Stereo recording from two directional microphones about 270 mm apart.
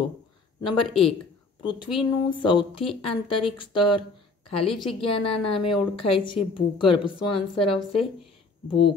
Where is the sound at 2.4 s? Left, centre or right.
Centre.